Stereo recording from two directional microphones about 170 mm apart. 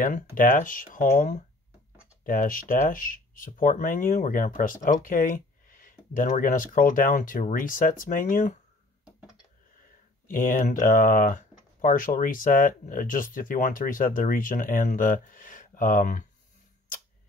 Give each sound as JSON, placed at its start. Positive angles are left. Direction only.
{"t": 0.0, "sound": "speech", "side_deg": 55}
{"t": 10.2, "sound": "speech", "side_deg": 55}